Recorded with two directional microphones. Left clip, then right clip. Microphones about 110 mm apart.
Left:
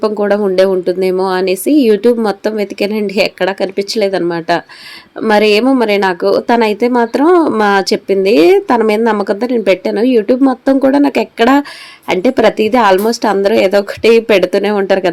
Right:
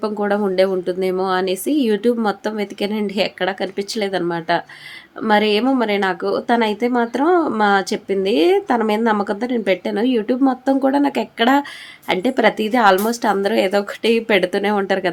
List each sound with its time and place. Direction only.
0.0 s speech: 30° left (ahead or behind)